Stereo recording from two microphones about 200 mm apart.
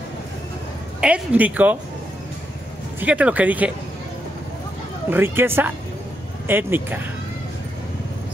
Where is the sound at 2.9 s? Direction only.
5° right (ahead or behind).